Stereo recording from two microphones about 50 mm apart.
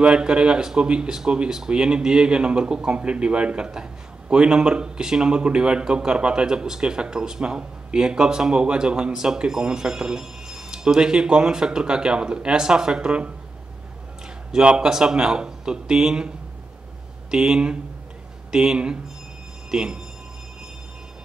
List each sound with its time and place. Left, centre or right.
0.0 s speech: centre
14.5 s speech: centre
17.3 s speech: centre